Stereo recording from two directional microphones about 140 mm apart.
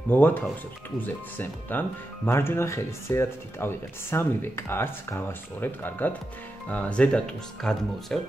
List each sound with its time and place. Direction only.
0.1 s speech: 15° left (ahead or behind)